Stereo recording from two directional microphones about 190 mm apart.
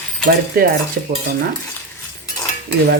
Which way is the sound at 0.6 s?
50° right (ahead or behind).